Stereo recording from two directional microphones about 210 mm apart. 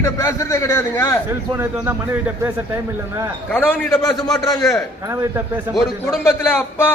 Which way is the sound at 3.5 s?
5° left (ahead or behind).